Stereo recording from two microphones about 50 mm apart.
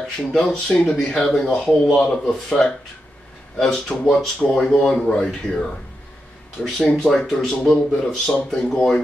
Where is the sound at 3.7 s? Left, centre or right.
Centre.